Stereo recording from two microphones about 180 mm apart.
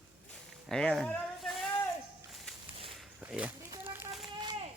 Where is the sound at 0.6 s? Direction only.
5° left (ahead or behind); by 4.1 s 10° right (ahead or behind).